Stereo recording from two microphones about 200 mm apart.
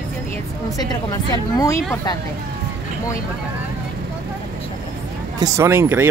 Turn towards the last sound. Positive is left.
turn(degrees=-10)  # may be behind; listen again after turning